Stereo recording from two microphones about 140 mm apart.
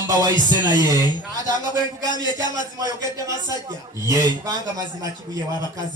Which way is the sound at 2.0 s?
25° right (ahead or behind).